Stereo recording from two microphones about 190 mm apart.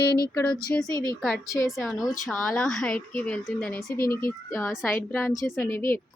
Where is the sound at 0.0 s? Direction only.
55° left (ahead or behind).